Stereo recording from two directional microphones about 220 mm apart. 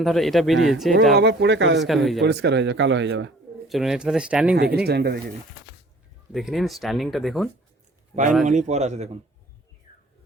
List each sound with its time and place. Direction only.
0.0 s speech: centre (ahead or behind)
1.1 s speech: 50° right (ahead or behind)
1.8 s speech: centre (ahead or behind)
2.2 s speech: 50° right (ahead or behind)
3.7 s speech: centre (ahead or behind)
4.9 s speech: 45° right (ahead or behind)
6.3 s a man's voice: centre (ahead or behind)
8.4 s a man's voice: 30° right (ahead or behind)